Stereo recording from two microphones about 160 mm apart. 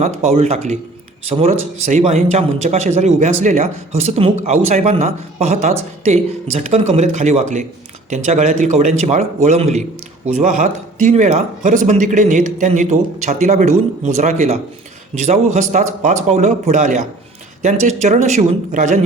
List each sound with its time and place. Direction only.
0.0 s speech: 45° right (ahead or behind)